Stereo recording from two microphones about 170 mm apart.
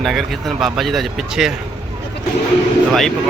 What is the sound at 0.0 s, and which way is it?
Speech, centre (ahead or behind).